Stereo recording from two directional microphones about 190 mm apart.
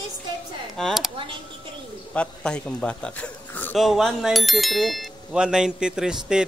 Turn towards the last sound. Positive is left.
turn(degrees=-5)  # may be behind; listen again after turning